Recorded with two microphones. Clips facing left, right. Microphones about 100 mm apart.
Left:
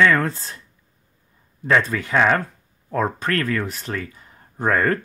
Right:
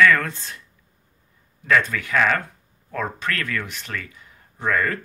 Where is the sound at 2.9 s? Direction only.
40° left (ahead or behind).